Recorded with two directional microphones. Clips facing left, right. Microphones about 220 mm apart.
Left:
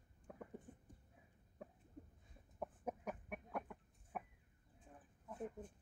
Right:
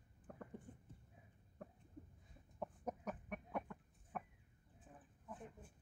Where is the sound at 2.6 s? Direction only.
5° left (ahead or behind).